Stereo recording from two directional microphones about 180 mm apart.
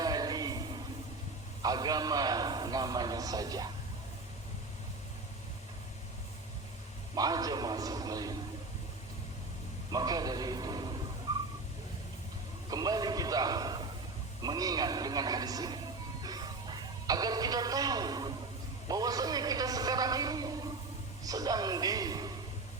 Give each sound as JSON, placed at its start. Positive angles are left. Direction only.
{"t": 0.0, "sound": "a sound", "side_deg": -20}
{"t": 1.6, "sound": "a man's voice", "side_deg": -20}
{"t": 7.2, "sound": "a man's voice", "side_deg": -20}
{"t": 9.9, "sound": "a man's voice", "side_deg": -20}
{"t": 12.7, "sound": "a sound", "side_deg": -20}
{"t": 14.4, "sound": "a man's voice", "side_deg": -20}
{"t": 16.2, "sound": "music", "side_deg": -20}
{"t": 18.9, "sound": "a man's voice", "side_deg": -20}